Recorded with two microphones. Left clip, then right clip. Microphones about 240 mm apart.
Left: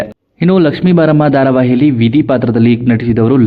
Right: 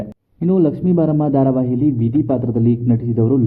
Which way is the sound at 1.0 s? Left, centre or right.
Left.